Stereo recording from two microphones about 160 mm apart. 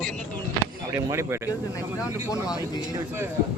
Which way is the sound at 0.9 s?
15° right (ahead or behind).